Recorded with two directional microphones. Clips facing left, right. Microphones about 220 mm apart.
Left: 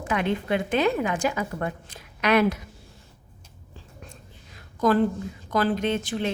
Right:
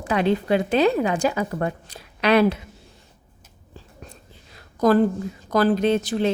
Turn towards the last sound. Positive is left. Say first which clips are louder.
# right 6 dB
turn(degrees=-35)  # may be behind; listen again after turning